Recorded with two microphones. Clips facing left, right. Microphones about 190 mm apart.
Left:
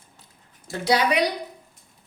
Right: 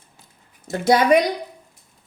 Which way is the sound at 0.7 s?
50° right (ahead or behind).